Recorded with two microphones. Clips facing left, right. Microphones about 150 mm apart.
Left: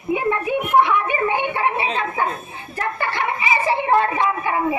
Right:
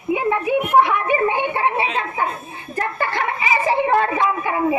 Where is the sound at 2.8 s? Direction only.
40° right (ahead or behind).